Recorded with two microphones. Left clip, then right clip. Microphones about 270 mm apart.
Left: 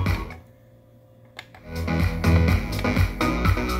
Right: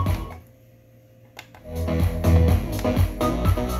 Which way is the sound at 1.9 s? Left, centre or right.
Left.